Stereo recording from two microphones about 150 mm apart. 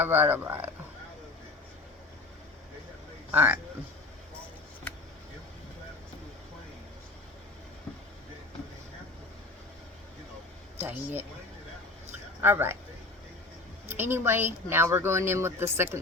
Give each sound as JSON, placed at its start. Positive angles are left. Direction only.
{"t": 0.0, "sound": "speech", "side_deg": -15}
{"t": 3.3, "sound": "speech", "side_deg": -10}
{"t": 10.8, "sound": "speech", "side_deg": -15}
{"t": 12.4, "sound": "speech", "side_deg": -15}
{"t": 13.9, "sound": "speech", "side_deg": -15}